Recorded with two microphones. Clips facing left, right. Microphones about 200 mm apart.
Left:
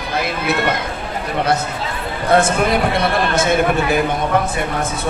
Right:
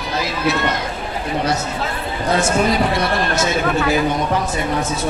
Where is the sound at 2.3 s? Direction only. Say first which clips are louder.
Left 3 dB; 55° left (ahead or behind).